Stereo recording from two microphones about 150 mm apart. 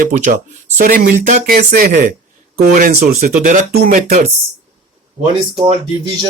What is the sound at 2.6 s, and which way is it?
Speech, 65° right (ahead or behind).